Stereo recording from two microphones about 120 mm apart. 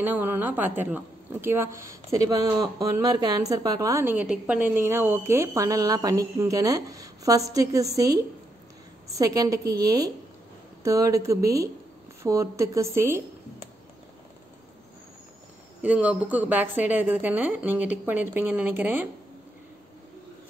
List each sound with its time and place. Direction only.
0.0 s a woman's voice: 15° right (ahead or behind)
9.1 s a woman's voice: 30° right (ahead or behind)
15.8 s a woman's voice: 10° right (ahead or behind)